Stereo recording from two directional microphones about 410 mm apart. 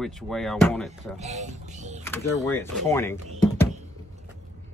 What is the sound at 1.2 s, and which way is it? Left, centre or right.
Speech, centre.